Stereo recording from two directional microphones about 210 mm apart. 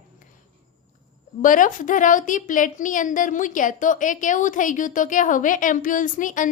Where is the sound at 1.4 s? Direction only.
40° left (ahead or behind).